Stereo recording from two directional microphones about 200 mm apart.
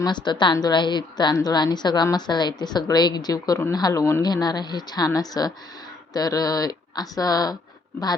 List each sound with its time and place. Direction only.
0.0 s a woman's voice: 20° left (ahead or behind)